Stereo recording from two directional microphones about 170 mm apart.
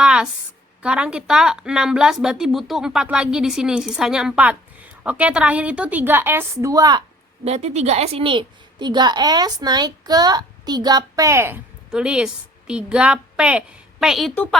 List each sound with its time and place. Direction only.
0.0 s a sound: 5° right (ahead or behind)
0.8 s a woman's voice: 5° right (ahead or behind); by 7.0 s 20° right (ahead or behind)
7.4 s a woman's voice: 40° right (ahead or behind); by 14.5 s 5° left (ahead or behind)